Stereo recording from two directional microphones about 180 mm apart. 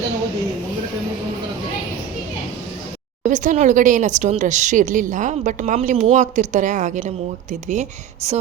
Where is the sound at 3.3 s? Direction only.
45° right (ahead or behind).